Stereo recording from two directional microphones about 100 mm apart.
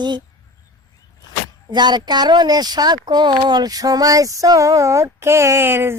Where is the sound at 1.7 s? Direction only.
45° right (ahead or behind).